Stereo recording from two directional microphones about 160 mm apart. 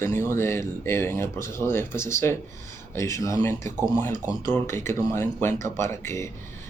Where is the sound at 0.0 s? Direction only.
15° left (ahead or behind).